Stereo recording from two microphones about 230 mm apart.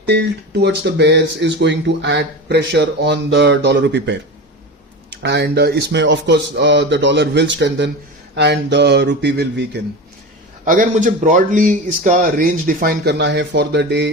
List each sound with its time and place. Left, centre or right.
0.0 s speech: right
10.7 s speech: right